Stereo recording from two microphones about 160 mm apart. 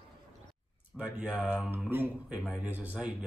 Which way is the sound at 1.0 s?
5° right (ahead or behind).